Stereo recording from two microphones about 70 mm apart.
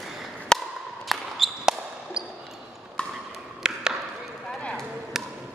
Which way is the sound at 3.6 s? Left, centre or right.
Centre.